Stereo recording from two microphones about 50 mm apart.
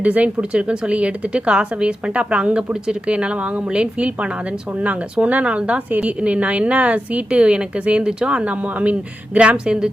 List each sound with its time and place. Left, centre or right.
0.0 s speech: right